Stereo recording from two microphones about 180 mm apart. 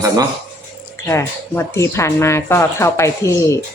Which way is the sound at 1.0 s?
15° left (ahead or behind).